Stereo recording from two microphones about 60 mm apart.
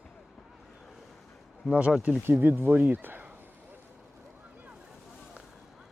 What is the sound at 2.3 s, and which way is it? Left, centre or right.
Speech, right.